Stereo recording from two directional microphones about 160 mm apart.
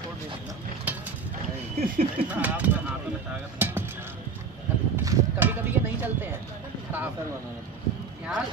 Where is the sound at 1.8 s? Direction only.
65° right (ahead or behind).